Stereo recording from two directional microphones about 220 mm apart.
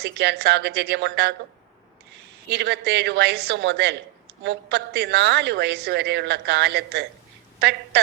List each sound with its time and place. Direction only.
0.0 s a woman's voice: 50° right (ahead or behind)
2.5 s a woman's voice: 50° right (ahead or behind)